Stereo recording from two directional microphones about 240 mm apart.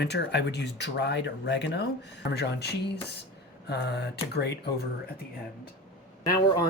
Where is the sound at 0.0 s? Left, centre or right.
Left.